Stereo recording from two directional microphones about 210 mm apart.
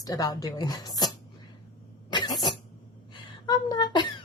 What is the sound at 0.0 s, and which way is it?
Speech, 15° left (ahead or behind).